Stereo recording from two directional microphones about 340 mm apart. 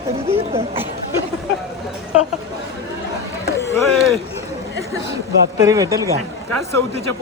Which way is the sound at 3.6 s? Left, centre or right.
Centre.